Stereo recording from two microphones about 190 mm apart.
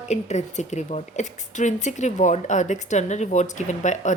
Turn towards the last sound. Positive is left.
turn(degrees=40)  # may be behind; listen again after turning